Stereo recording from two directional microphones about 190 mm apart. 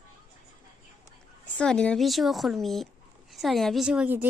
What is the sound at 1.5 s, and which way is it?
Speech, 5° left (ahead or behind).